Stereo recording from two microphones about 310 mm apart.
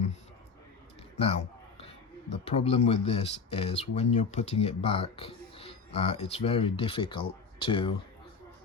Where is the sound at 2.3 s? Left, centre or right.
Centre.